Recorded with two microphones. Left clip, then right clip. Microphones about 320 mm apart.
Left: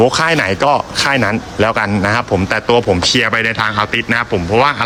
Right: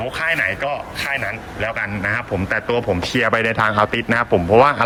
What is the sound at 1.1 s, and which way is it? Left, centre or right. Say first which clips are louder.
Speech: left 6 dB; left.